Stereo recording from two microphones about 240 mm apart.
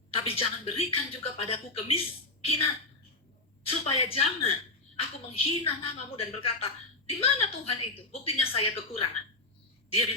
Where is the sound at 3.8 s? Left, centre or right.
Left.